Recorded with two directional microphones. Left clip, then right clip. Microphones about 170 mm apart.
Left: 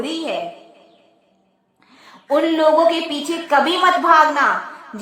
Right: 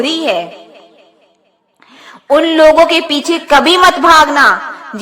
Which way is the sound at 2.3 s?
25° right (ahead or behind).